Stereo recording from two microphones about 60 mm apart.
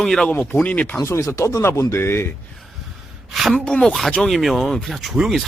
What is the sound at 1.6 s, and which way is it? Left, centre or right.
Speech, left.